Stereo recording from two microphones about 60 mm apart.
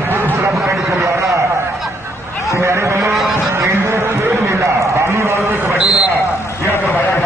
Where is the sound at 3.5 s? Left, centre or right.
Right.